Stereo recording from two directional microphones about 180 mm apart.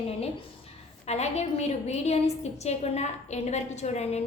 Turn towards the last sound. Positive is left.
turn(degrees=35)  # may be behind; listen again after turning